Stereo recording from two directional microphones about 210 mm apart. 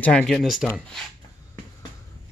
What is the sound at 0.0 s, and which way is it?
Speech, 5° left (ahead or behind).